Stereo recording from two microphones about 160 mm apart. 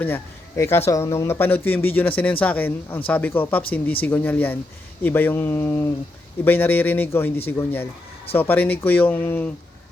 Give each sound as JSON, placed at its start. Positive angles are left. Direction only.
{"t": 0.0, "sound": "speech", "side_deg": 15}